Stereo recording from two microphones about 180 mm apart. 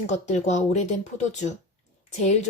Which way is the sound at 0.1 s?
40° left (ahead or behind).